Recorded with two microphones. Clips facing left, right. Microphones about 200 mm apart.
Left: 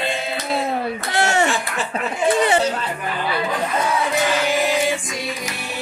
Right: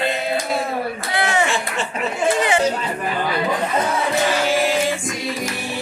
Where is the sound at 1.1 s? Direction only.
45° left (ahead or behind).